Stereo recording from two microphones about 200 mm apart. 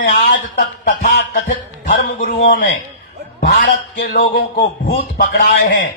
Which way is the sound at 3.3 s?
45° left (ahead or behind).